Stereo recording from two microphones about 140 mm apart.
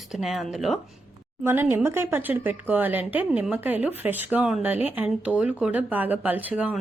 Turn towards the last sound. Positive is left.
turn(degrees=-10)  # may be behind; listen again after turning